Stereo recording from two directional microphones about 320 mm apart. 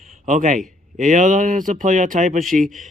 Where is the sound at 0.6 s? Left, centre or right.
Centre.